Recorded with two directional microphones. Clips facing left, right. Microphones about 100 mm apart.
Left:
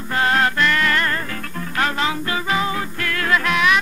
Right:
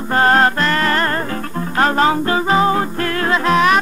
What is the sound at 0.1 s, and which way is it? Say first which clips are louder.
Music: right 5 dB; 40° right (ahead or behind).